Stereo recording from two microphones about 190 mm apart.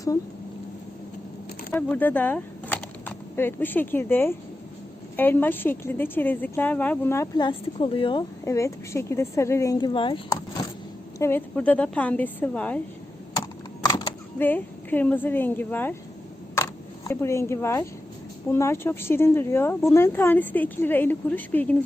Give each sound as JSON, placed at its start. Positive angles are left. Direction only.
{"t": 1.7, "sound": "speech", "side_deg": 10}
{"t": 8.4, "sound": "speech", "side_deg": 15}
{"t": 11.2, "sound": "speech", "side_deg": 10}
{"t": 13.3, "sound": "typing", "side_deg": 20}
{"t": 14.3, "sound": "speech", "side_deg": 10}
{"t": 16.6, "sound": "single-lens reflex camera", "side_deg": 15}
{"t": 18.4, "sound": "speech", "side_deg": 15}